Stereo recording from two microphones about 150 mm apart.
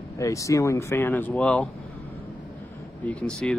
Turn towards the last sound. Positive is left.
turn(degrees=5)  # may be behind; listen again after turning